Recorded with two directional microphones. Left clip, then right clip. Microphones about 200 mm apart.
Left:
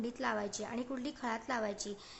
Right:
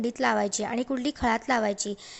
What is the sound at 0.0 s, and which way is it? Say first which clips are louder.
A woman's voice: right 11 dB; 35° right (ahead or behind).